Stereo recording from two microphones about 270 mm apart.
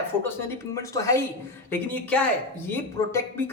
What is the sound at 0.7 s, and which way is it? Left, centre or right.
A woman's voice, centre.